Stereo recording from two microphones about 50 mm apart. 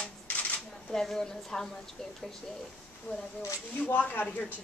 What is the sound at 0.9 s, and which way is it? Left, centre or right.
Speech, centre.